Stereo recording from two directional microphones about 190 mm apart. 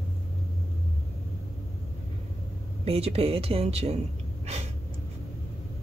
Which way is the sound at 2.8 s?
30° right (ahead or behind).